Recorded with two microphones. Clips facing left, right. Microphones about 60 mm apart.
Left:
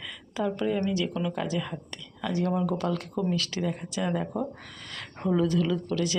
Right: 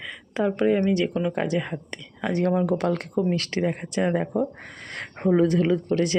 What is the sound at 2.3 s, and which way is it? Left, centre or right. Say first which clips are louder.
Speech: right 5 dB; right.